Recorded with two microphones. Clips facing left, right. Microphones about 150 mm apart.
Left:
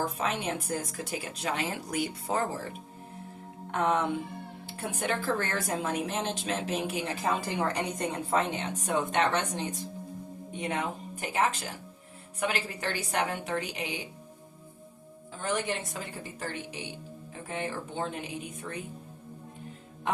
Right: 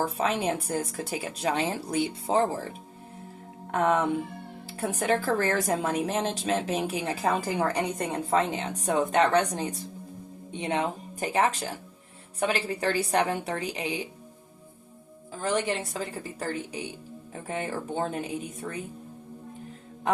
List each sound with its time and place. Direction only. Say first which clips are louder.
0.0 s a woman's voice: right 4 dB; 35° right (ahead or behind)
3.7 s music: right 3 dB; 35° right (ahead or behind)
4.8 s a woman's voice: right 6 dB; 35° right (ahead or behind)
15.4 s a woman's voice: right 4 dB; 35° right (ahead or behind)